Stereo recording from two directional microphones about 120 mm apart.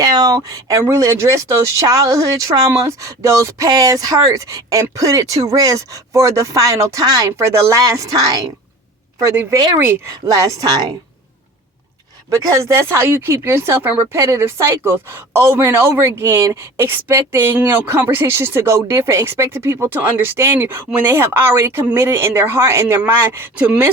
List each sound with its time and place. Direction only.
0.0 s speech: 35° right (ahead or behind)
12.3 s speech: 25° right (ahead or behind)